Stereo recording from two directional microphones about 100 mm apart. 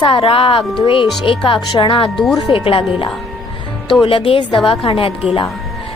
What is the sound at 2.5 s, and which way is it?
Speech, 65° left (ahead or behind).